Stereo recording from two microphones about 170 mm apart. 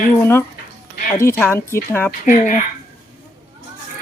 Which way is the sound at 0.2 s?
15° left (ahead or behind).